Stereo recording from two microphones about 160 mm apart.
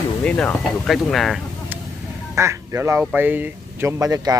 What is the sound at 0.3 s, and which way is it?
Speech, 5° left (ahead or behind).